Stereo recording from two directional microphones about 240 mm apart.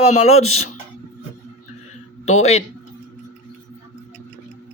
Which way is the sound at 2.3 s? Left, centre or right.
Left.